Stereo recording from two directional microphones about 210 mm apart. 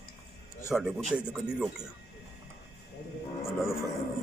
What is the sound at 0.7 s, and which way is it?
A man's voice, centre (ahead or behind).